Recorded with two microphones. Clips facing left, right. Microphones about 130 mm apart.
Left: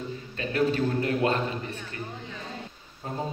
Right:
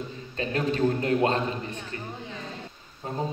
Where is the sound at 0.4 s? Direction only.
35° right (ahead or behind).